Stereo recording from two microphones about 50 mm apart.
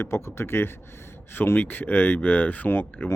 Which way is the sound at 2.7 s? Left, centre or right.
Left.